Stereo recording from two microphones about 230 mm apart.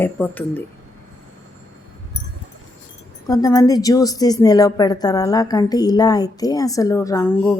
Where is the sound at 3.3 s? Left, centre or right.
Centre.